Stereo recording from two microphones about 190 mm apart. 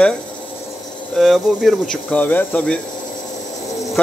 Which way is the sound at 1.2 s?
Centre (ahead or behind).